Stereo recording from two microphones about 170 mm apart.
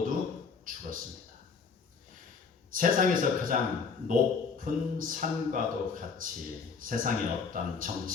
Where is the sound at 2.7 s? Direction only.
55° right (ahead or behind).